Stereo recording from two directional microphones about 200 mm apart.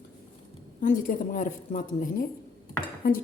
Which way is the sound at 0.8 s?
40° left (ahead or behind).